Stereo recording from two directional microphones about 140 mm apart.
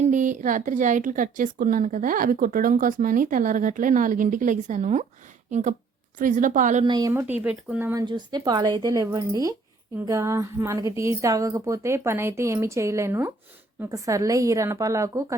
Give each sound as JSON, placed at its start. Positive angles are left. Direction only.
{"t": 0.0, "sound": "a woman's voice", "side_deg": -65}
{"t": 6.1, "sound": "a woman's voice", "side_deg": -70}
{"t": 6.8, "sound": "a woman's voice", "side_deg": -30}
{"t": 7.1, "sound": "speech", "side_deg": -15}
{"t": 8.0, "sound": "a woman's voice", "side_deg": -30}